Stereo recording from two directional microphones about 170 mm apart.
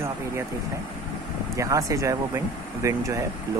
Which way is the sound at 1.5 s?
20° right (ahead or behind).